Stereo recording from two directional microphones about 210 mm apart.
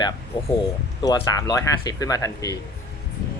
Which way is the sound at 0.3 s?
20° left (ahead or behind).